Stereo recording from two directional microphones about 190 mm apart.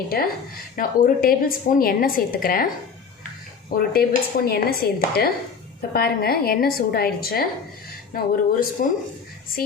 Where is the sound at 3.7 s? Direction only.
50° left (ahead or behind).